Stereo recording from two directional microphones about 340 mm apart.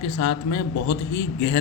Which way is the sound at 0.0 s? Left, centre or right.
Left.